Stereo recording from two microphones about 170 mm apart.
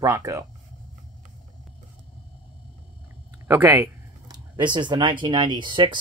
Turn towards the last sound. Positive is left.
turn(degrees=-25)  # may be behind; listen again after turning